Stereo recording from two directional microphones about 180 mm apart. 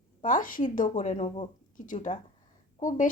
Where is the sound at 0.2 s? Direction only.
50° left (ahead or behind).